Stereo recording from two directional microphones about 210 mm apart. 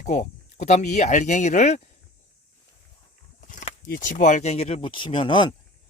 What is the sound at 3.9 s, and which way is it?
Speech, 40° left (ahead or behind).